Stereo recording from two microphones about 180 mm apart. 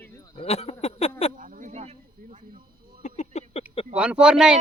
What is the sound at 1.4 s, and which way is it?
Chop, 50° right (ahead or behind).